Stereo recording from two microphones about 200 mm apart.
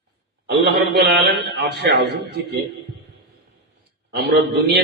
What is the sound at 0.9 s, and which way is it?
A man's voice, 55° right (ahead or behind).